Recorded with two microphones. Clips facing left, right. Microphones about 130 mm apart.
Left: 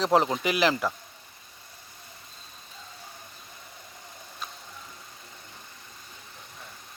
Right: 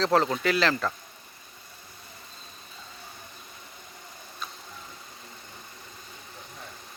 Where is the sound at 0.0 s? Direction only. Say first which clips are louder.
Even; 15° left (ahead or behind).